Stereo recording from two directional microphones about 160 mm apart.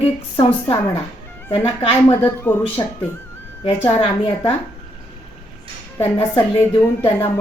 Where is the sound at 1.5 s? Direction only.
35° left (ahead or behind).